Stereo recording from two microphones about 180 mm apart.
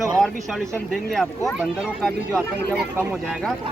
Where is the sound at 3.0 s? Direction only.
10° right (ahead or behind).